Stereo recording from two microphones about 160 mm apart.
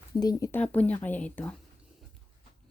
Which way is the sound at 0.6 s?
10° left (ahead or behind).